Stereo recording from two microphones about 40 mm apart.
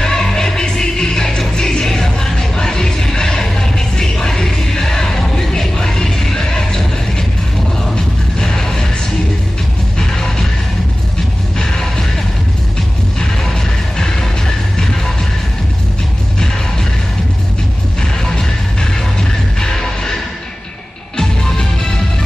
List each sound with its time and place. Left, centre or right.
0.0 s music: centre
9.9 s music: centre
11.6 s music: centre
13.2 s music: centre
18.2 s music: centre
21.2 s music: centre